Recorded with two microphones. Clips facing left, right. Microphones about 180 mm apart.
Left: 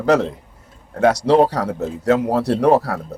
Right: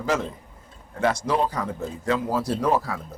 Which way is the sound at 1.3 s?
70° left (ahead or behind).